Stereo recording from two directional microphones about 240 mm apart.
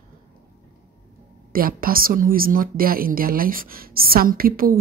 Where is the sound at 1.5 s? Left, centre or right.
Right.